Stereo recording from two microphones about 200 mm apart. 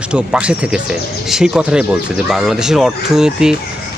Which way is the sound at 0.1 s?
5° right (ahead or behind).